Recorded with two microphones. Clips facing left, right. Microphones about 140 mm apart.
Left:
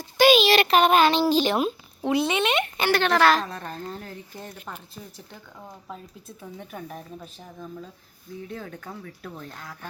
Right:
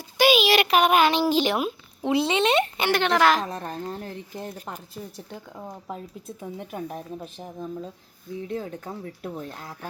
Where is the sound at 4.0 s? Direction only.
30° right (ahead or behind).